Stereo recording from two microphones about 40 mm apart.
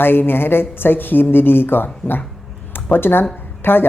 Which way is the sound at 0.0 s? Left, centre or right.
Left.